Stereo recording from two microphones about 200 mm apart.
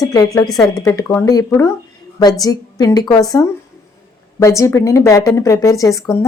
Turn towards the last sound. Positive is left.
turn(degrees=15)  # may be behind; listen again after turning